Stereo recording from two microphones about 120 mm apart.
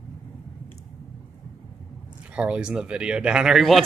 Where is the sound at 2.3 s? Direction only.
10° right (ahead or behind).